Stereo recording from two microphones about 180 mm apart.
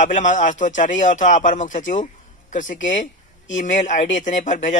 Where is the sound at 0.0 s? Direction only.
45° left (ahead or behind).